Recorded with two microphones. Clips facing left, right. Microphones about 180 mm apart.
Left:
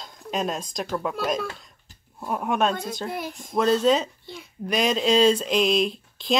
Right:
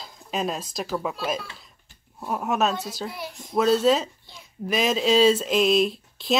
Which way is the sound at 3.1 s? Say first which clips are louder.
Left 4 dB; 50° left (ahead or behind).